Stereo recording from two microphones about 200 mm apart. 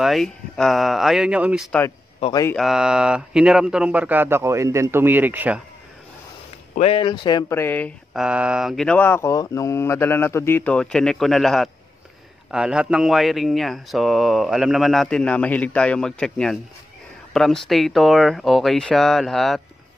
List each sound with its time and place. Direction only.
0.0 s speech: centre (ahead or behind)
6.7 s speech: 30° left (ahead or behind); by 7.9 s 10° left (ahead or behind)
8.1 s speech: 5° right (ahead or behind)